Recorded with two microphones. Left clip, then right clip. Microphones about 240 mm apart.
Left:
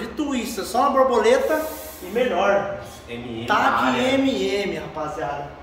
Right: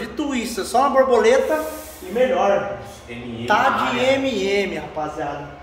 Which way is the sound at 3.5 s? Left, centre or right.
Centre.